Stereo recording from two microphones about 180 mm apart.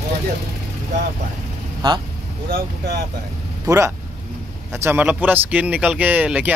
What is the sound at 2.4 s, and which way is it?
Speech, 55° right (ahead or behind).